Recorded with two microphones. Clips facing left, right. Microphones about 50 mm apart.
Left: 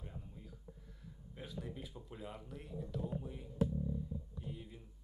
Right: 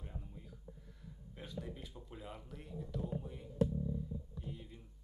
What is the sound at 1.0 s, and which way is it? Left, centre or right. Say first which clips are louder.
Speech: left 1 dB; centre.